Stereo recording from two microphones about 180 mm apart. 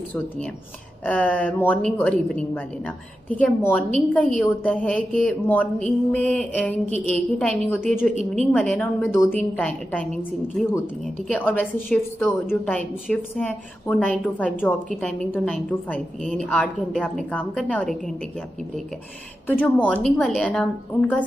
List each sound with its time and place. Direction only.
1.0 s a woman's voice: 10° left (ahead or behind)
11.3 s a woman's voice: 10° left (ahead or behind)
16.6 s a woman's voice: 10° right (ahead or behind)
19.6 s a woman's voice: 5° left (ahead or behind)